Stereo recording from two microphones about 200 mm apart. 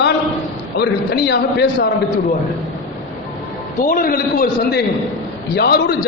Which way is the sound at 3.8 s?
45° left (ahead or behind).